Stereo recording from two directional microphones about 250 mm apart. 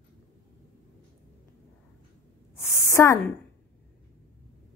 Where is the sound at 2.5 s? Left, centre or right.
Centre.